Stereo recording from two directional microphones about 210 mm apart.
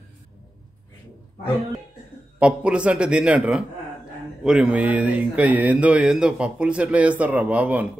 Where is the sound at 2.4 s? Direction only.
5° right (ahead or behind).